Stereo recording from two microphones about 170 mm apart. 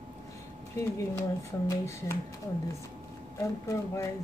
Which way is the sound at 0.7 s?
20° left (ahead or behind).